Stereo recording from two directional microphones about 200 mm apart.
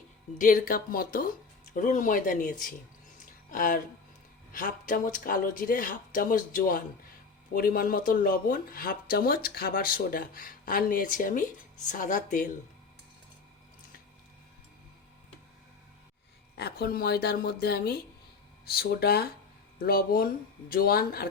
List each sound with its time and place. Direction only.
0.3 s speech: 45° left (ahead or behind)
16.6 s speech: 55° left (ahead or behind)